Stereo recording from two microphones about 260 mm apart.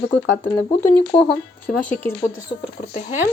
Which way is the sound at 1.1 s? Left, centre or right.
Centre.